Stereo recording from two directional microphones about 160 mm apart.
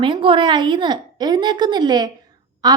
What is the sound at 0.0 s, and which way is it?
A woman's voice, 30° right (ahead or behind).